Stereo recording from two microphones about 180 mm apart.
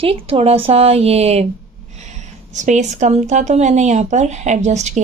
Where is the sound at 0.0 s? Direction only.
30° right (ahead or behind).